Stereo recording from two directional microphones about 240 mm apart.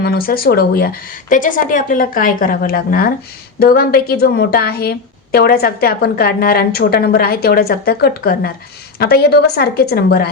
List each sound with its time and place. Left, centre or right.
0.0 s a woman's voice: left